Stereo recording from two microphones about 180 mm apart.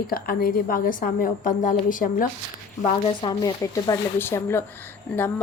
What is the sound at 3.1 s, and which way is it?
Speech, 25° left (ahead or behind).